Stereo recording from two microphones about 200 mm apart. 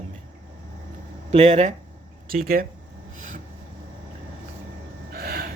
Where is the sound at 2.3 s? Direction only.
45° right (ahead or behind).